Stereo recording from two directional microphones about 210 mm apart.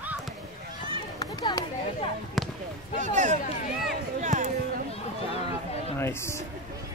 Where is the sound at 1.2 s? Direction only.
20° left (ahead or behind).